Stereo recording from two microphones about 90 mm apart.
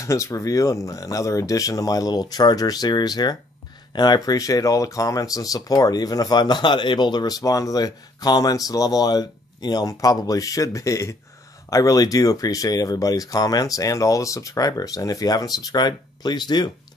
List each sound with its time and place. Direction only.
0.0 s speech: 35° left (ahead or behind); by 16.7 s 50° left (ahead or behind)